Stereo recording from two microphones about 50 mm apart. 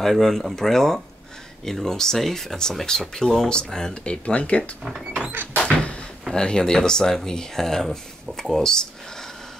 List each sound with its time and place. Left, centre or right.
0.0 s speech: centre; by 4.6 s left
5.3 s door: right
5.6 s a sound: left
6.2 s speech: centre